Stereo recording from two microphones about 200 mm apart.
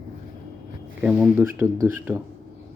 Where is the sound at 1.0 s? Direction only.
5° right (ahead or behind).